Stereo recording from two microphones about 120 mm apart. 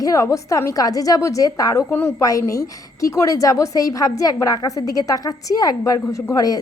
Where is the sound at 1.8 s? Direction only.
15° left (ahead or behind).